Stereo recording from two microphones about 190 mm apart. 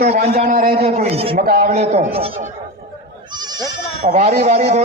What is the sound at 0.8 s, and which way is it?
Speech, 35° right (ahead or behind).